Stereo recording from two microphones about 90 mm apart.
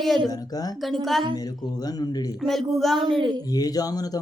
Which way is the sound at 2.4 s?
Centre (ahead or behind).